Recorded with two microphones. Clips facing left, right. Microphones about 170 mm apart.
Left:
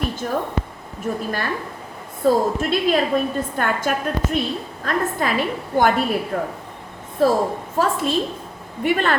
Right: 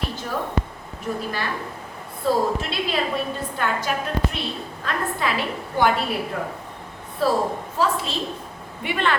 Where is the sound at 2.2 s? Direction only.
45° left (ahead or behind).